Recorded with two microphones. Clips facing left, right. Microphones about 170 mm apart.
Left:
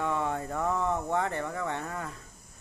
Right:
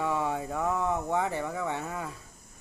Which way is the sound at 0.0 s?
5° right (ahead or behind).